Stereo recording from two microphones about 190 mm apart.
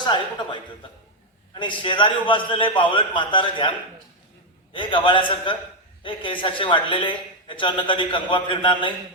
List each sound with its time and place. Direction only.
1.5 s a man's voice: 25° left (ahead or behind)
4.7 s a man's voice: 25° left (ahead or behind)